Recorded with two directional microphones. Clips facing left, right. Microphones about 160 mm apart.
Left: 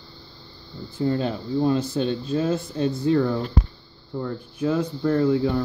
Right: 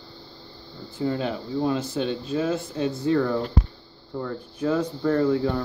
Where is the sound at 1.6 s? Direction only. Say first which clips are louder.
Left 3 dB; 35° left (ahead or behind).